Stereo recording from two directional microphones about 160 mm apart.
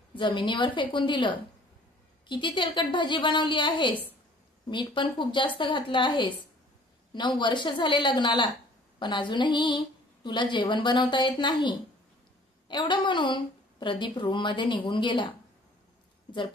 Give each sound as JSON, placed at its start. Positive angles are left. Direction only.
{"t": 0.1, "sound": "a woman's voice", "side_deg": 30}